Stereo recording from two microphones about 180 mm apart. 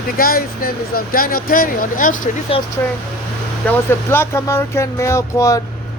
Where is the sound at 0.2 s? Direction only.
55° left (ahead or behind).